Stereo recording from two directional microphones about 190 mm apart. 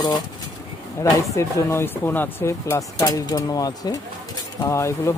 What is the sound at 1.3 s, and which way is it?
Speech, 15° left (ahead or behind).